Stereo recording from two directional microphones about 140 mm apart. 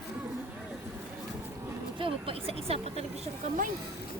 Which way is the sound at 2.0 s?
40° right (ahead or behind).